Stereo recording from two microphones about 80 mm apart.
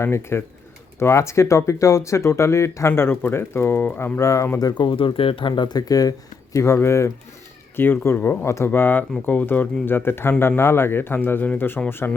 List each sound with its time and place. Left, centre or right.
0.0 s speech: left
4.6 s speech: left